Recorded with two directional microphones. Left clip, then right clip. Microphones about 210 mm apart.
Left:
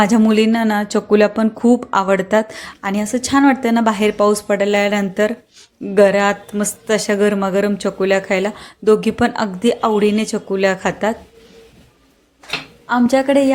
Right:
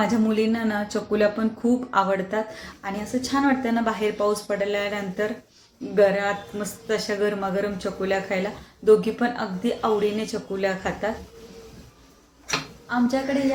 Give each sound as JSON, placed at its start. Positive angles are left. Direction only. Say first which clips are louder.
{"t": 0.0, "sound": "speech", "louder": "left 9 dB", "side_deg": 45}
{"t": 12.9, "sound": "speech", "louder": "left 10 dB", "side_deg": 50}